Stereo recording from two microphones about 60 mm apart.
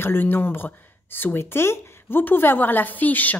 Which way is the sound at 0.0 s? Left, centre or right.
Left.